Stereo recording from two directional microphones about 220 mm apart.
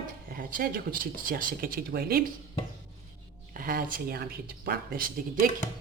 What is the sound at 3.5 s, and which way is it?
Speech, 40° right (ahead or behind).